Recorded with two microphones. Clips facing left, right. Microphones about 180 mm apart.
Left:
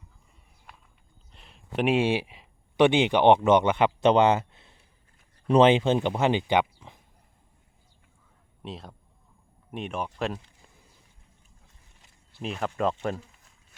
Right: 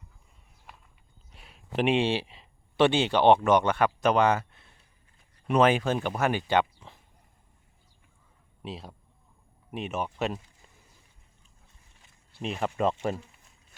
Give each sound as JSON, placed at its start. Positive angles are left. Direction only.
{"t": 1.3, "sound": "speech", "side_deg": -5}
{"t": 8.6, "sound": "speech", "side_deg": 0}
{"t": 12.4, "sound": "speech", "side_deg": 0}